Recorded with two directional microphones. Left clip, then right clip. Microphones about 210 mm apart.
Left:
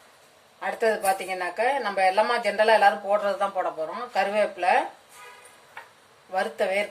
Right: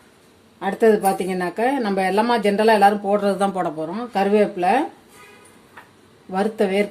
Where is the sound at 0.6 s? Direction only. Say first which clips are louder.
Right 7 dB; 45° right (ahead or behind).